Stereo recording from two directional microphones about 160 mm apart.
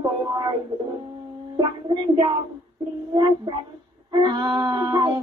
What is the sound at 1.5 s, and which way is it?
Music, 30° right (ahead or behind).